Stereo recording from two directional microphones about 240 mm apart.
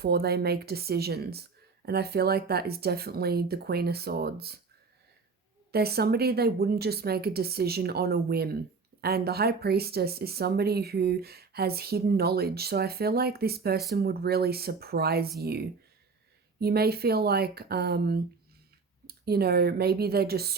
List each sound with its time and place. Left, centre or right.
0.0 s speech: right
5.7 s speech: right